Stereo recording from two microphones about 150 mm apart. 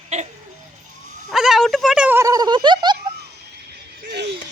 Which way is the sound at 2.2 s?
25° right (ahead or behind).